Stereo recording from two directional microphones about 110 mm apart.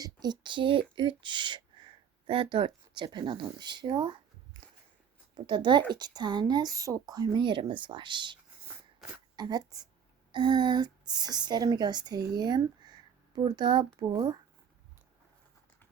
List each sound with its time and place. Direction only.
0.0 s speech: 40° right (ahead or behind)
5.5 s a woman's voice: 45° right (ahead or behind)
14.0 s speech: 30° right (ahead or behind)